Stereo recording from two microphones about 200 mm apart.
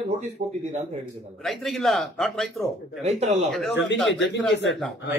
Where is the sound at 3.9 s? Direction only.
Centre (ahead or behind).